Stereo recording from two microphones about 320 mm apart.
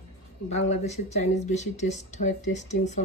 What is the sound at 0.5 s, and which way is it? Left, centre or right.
Speech, left.